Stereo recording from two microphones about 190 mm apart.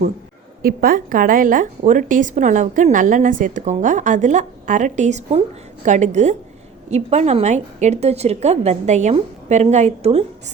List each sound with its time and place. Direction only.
0.6 s a woman's voice: 50° right (ahead or behind); by 10.2 s 30° right (ahead or behind)